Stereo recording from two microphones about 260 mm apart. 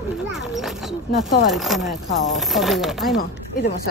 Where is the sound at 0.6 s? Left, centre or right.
Centre.